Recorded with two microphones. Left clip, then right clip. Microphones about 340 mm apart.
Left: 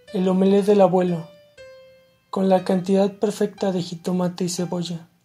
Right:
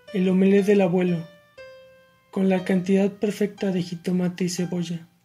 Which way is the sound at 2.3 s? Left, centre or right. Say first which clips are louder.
Left 5 dB; left.